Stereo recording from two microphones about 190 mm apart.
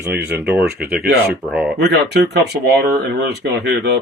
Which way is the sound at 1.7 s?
60° right (ahead or behind).